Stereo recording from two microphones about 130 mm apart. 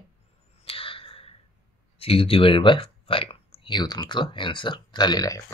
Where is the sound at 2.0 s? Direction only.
45° left (ahead or behind).